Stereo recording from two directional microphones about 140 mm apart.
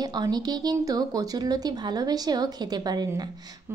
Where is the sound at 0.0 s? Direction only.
30° right (ahead or behind).